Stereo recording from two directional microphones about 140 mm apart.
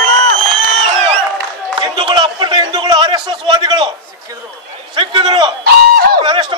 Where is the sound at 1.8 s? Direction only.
35° right (ahead or behind).